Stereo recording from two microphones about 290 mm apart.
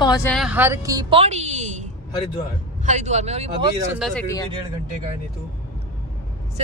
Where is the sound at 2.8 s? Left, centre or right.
Right.